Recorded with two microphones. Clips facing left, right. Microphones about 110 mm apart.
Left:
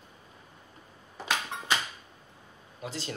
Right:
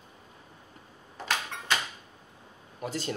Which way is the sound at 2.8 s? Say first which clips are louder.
Right 4 dB; 45° right (ahead or behind).